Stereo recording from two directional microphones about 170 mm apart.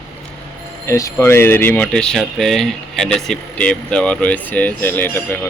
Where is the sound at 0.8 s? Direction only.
20° left (ahead or behind).